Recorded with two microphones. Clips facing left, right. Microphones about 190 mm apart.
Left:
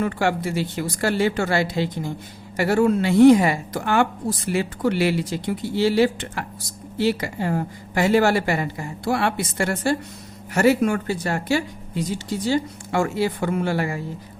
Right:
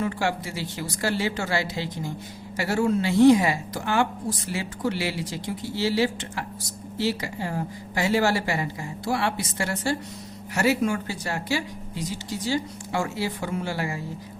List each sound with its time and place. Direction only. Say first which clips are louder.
0.0 s speech: left 4 dB; 55° left (ahead or behind)